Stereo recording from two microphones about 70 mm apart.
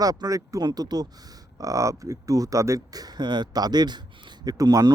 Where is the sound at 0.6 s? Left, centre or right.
Right.